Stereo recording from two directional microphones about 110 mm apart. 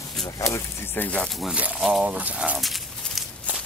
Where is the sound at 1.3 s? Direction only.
10° right (ahead or behind).